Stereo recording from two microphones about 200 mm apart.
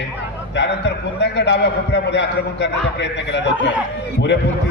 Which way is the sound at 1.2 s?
55° left (ahead or behind).